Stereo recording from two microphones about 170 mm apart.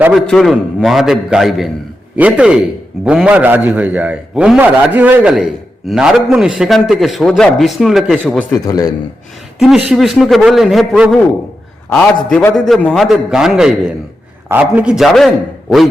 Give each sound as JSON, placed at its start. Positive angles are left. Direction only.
{"t": 0.0, "sound": "a man's voice", "side_deg": 0}
{"t": 8.6, "sound": "a man's voice", "side_deg": 20}
{"t": 9.6, "sound": "a man's voice", "side_deg": 0}